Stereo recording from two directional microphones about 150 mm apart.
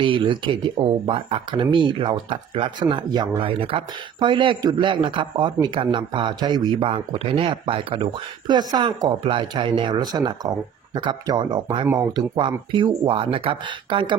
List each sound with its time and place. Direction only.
0.0 s speech: 35° right (ahead or behind)